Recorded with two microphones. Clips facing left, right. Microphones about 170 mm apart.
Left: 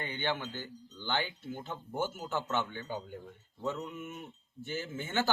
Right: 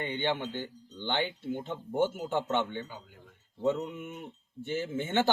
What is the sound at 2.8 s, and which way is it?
Speech, 35° left (ahead or behind).